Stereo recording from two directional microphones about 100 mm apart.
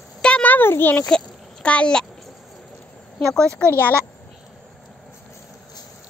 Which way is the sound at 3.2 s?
5° left (ahead or behind).